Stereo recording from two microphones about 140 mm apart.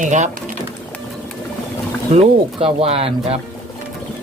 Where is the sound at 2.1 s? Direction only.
45° right (ahead or behind).